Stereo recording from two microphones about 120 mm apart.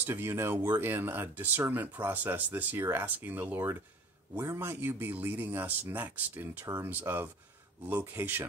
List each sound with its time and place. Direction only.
0.0 s speech: 20° right (ahead or behind)